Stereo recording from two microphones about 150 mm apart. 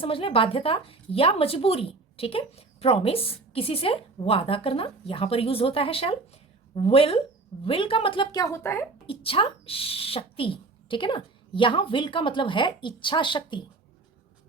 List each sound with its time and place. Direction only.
0.0 s speech: 35° left (ahead or behind); by 8.9 s 15° left (ahead or behind)
9.0 s speech: 40° left (ahead or behind)